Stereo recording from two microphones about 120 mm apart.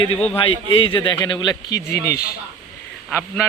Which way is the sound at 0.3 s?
45° left (ahead or behind).